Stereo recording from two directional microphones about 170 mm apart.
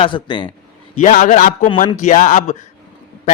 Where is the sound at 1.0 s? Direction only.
50° left (ahead or behind).